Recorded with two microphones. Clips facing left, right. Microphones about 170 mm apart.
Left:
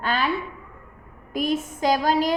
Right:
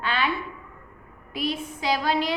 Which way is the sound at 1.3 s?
45° left (ahead or behind).